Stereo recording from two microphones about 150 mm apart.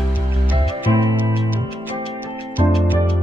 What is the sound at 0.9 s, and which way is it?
Music, 25° right (ahead or behind).